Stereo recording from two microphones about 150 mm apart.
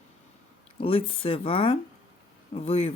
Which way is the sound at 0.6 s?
40° left (ahead or behind).